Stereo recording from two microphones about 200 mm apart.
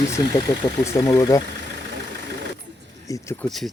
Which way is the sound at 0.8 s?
15° left (ahead or behind).